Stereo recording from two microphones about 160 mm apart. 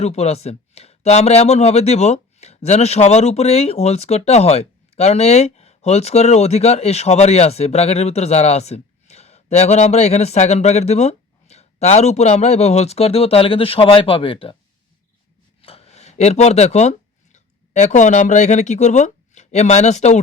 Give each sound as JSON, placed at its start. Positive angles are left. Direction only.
{"t": 0.0, "sound": "speech", "side_deg": 40}
{"t": 15.6, "sound": "a sound", "side_deg": 40}
{"t": 17.3, "sound": "speech", "side_deg": 50}